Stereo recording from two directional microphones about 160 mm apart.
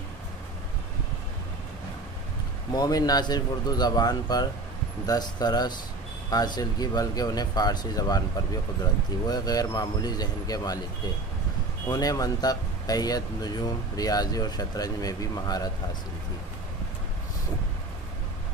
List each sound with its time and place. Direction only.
2.7 s speech: 25° left (ahead or behind)
9.3 s speech: 25° left (ahead or behind)
11.9 s speech: 25° left (ahead or behind)